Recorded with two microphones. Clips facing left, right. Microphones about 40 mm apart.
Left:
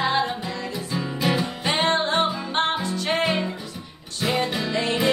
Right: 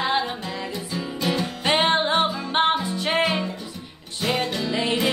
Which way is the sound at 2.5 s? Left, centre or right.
Centre.